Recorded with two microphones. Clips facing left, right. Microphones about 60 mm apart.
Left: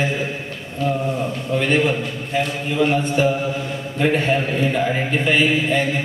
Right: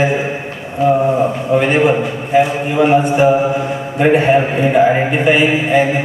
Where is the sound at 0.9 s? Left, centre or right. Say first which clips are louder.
Right 11 dB; right.